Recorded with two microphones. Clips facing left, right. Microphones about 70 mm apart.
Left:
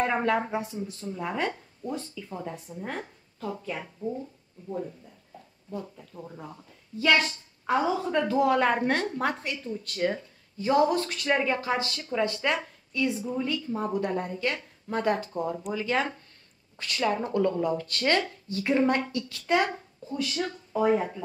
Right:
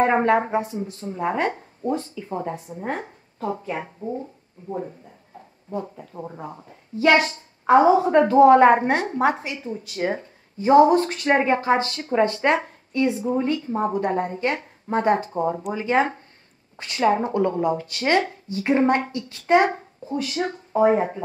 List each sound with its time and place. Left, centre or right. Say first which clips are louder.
0.0 s speech: right 7 dB; right
7.2 s a sound: right 6 dB; centre
7.7 s speech: right 11 dB; right
9.2 s a woman's voice: right 8 dB; centre
9.9 s a woman's voice: right 3 dB; right
20.2 s a woman's voice: right 5 dB; right